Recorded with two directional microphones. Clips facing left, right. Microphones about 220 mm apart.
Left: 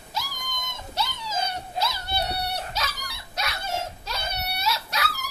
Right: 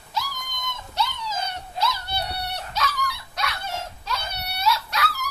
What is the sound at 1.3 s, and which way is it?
Dog, 25° left (ahead or behind).